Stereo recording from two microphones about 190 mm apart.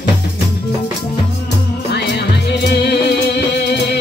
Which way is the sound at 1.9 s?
60° left (ahead or behind).